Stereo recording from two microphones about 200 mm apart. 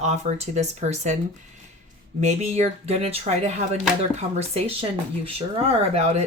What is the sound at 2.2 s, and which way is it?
Speech, 35° right (ahead or behind).